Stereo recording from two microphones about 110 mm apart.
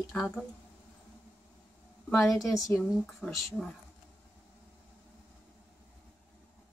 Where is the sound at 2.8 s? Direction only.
5° left (ahead or behind).